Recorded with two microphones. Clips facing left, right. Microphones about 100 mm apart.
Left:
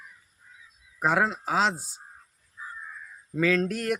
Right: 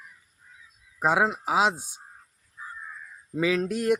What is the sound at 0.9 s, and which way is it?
Speech, 15° right (ahead or behind).